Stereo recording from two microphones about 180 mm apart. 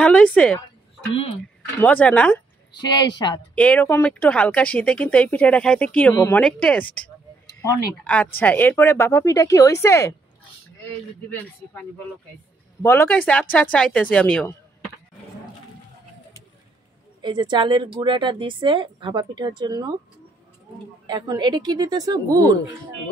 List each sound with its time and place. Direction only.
0.0 s speech: 5° left (ahead or behind)
1.1 s speech: 30° left (ahead or behind)
1.8 s speech: 10° left (ahead or behind)
2.8 s a woman's voice: 25° left (ahead or behind)
3.5 s speech: 5° left (ahead or behind)
8.0 s speech: 5° left (ahead or behind)
11.2 s speech: 10° left (ahead or behind)
12.8 s speech: 15° left (ahead or behind)
17.2 s a woman's voice: 25° right (ahead or behind)
21.1 s a woman's voice: 25° right (ahead or behind)